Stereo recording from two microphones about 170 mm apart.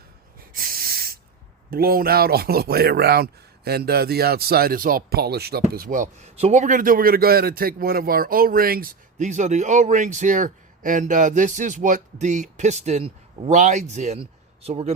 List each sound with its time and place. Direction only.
0.5 s snort: 60° right (ahead or behind)
1.7 s a man's voice: 60° right (ahead or behind); by 14.9 s 40° right (ahead or behind)